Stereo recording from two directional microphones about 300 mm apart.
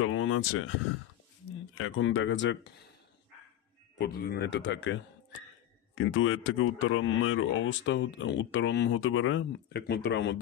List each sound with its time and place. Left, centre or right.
0.0 s speech: left
1.8 s speech: left
4.0 s speech: left